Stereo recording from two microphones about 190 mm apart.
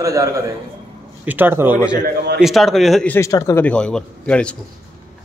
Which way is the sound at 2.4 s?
Centre (ahead or behind).